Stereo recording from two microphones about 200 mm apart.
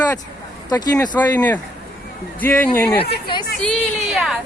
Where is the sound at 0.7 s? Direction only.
15° left (ahead or behind).